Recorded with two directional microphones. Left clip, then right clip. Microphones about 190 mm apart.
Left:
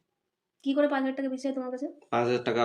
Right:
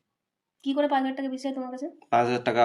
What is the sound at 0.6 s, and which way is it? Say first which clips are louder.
A woman's voice: right 2 dB; 10° right (ahead or behind).